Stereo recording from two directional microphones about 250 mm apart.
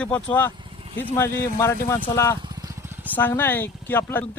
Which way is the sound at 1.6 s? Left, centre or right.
Centre.